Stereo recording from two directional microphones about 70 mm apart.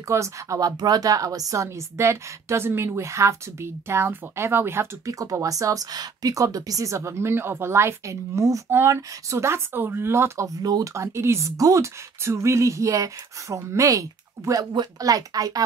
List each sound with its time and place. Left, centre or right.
0.1 s speech: right
0.6 s speech: right
5.0 s speech: right
8.6 s speech: right